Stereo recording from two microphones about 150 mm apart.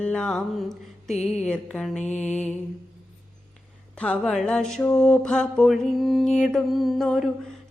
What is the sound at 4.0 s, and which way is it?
Mantra, 5° left (ahead or behind).